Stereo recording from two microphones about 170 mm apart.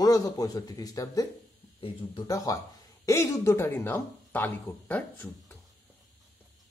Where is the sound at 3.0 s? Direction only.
20° left (ahead or behind).